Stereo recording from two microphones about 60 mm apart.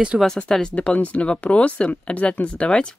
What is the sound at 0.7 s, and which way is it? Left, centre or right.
Speech, left.